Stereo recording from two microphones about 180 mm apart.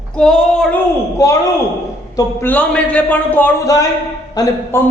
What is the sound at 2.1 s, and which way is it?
A man's voice, 10° left (ahead or behind).